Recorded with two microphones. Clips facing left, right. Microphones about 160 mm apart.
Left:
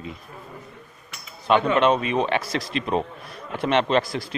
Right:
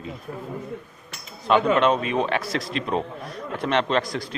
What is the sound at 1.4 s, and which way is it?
Speech, centre (ahead or behind).